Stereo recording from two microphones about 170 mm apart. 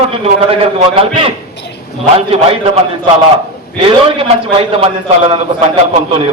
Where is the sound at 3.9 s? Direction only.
30° right (ahead or behind).